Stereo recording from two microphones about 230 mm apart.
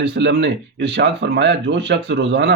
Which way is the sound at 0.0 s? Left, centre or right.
Right.